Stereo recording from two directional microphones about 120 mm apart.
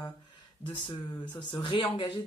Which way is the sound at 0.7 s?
40° left (ahead or behind).